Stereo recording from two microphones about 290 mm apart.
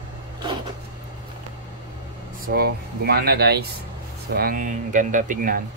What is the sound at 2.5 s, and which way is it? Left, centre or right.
Speech, right.